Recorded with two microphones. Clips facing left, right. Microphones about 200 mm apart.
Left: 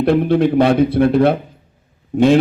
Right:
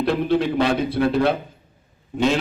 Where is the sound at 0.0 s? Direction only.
55° left (ahead or behind).